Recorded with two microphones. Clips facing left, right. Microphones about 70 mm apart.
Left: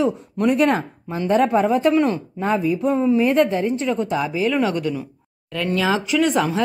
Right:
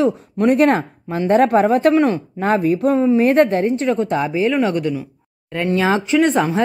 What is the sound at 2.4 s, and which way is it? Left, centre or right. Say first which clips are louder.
Speech: right 4 dB; right.